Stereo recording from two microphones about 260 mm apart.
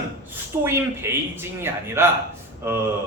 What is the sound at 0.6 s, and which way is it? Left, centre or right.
A man's voice, centre.